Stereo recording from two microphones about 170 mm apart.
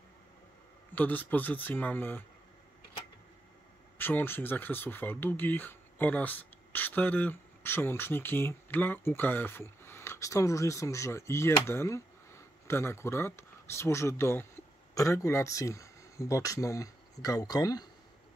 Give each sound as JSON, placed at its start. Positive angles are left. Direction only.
{"t": 0.9, "sound": "speech", "side_deg": 10}
{"t": 4.0, "sound": "speech", "side_deg": 10}